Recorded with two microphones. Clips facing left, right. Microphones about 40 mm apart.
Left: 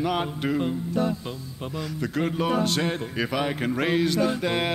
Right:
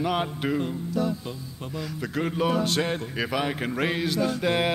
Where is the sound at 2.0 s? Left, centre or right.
Centre.